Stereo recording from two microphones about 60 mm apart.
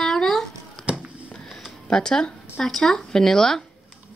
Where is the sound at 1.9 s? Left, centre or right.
Centre.